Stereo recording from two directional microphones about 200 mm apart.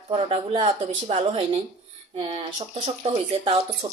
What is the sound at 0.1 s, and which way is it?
Speech, 30° right (ahead or behind).